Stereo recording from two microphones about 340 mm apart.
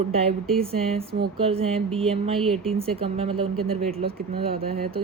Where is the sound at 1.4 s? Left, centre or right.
Centre.